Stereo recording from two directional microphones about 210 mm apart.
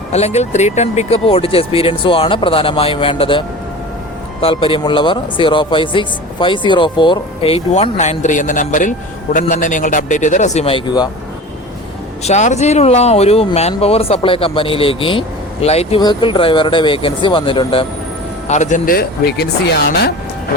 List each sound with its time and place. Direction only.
0.1 s speech: 30° left (ahead or behind)
12.2 s speech: 35° left (ahead or behind); by 20.1 s 50° left (ahead or behind)